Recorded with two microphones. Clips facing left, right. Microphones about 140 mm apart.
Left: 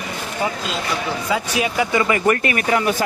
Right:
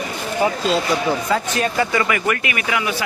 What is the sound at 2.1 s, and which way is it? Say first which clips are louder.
Speech: left 3 dB; 35° left (ahead or behind).